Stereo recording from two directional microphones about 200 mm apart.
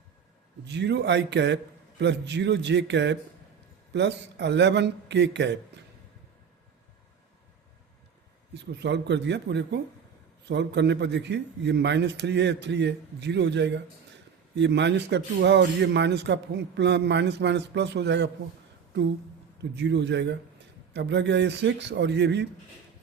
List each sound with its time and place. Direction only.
0.6 s a man's voice: 60° right (ahead or behind)
8.5 s a man's voice: 60° right (ahead or behind)
19.7 s a man's voice: 60° right (ahead or behind)